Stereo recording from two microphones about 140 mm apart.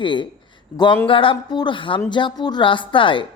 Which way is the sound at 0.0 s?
35° left (ahead or behind).